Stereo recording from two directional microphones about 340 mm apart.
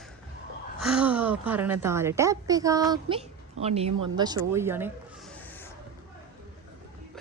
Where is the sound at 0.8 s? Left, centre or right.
Centre.